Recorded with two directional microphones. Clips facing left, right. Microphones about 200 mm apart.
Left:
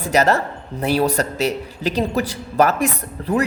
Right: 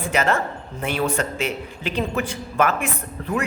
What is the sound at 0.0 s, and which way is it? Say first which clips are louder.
Speech: left 4 dB; 40° left (ahead or behind).